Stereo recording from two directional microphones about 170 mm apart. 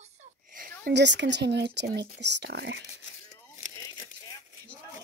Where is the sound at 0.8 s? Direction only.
90° right.